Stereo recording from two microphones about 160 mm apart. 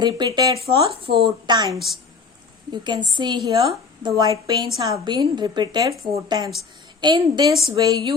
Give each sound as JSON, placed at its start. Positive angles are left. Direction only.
{"t": 0.0, "sound": "a woman's voice", "side_deg": -25}
{"t": 4.2, "sound": "a woman's voice", "side_deg": -25}